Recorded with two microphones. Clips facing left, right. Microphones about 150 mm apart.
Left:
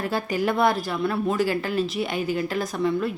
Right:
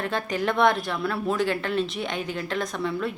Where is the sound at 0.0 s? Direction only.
5° left (ahead or behind).